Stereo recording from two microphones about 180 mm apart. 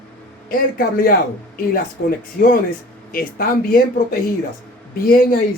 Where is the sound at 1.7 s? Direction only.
50° left (ahead or behind).